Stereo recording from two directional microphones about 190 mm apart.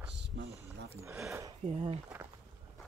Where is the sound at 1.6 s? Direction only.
35° right (ahead or behind).